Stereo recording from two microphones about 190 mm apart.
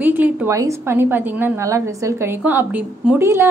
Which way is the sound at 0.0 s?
10° right (ahead or behind).